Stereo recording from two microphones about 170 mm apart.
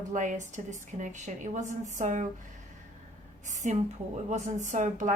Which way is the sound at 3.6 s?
45° right (ahead or behind).